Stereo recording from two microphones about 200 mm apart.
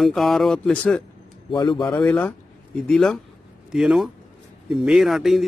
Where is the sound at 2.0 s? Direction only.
5° left (ahead or behind).